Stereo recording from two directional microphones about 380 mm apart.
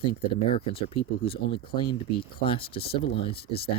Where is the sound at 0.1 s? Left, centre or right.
Centre.